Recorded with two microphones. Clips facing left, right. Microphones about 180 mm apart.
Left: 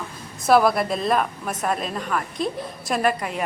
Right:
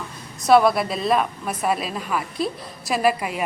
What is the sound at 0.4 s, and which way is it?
A woman's voice, centre (ahead or behind).